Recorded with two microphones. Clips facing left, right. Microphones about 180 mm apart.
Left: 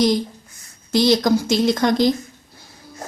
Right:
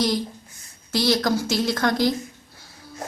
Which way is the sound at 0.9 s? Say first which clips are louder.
Left 5 dB; 20° left (ahead or behind).